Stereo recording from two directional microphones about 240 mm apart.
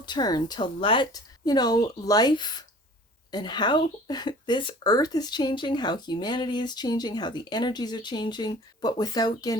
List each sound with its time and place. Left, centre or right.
0.0 s speech: centre